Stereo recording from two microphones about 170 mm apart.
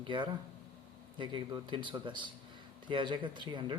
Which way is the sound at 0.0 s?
30° right (ahead or behind).